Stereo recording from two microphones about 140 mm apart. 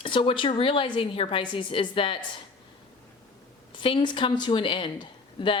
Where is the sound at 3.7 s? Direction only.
40° left (ahead or behind).